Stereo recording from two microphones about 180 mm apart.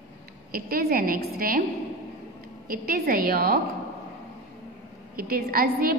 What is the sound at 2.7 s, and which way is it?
Speech, 55° right (ahead or behind).